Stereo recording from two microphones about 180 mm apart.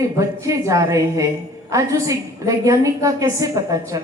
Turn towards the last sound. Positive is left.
turn(degrees=-20)  # may be behind; listen again after turning